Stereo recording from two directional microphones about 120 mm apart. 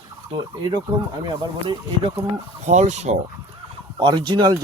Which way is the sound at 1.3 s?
40° right (ahead or behind).